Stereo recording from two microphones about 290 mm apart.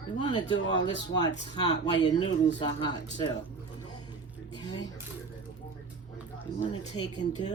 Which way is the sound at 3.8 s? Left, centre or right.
Centre.